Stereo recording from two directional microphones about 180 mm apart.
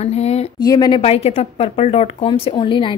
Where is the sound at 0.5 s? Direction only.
20° left (ahead or behind).